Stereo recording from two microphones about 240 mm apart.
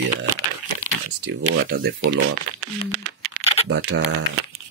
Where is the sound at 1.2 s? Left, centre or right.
Right.